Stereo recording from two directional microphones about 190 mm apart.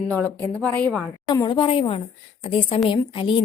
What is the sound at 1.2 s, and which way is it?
A woman's voice, 20° left (ahead or behind).